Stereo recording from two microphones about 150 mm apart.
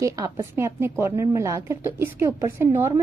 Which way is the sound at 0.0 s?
20° right (ahead or behind).